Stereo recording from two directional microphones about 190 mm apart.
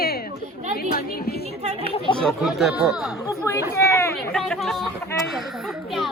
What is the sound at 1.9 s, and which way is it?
Speech, 25° left (ahead or behind).